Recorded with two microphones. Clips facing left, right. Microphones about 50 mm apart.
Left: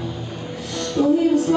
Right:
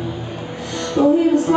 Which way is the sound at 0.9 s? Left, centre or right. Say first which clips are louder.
Right 3 dB; centre.